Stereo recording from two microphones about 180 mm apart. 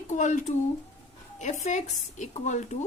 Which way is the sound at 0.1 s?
40° left (ahead or behind).